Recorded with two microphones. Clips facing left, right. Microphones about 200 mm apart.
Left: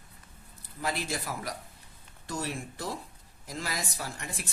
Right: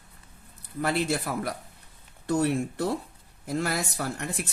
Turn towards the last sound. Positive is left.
turn(degrees=-65)  # may be behind; listen again after turning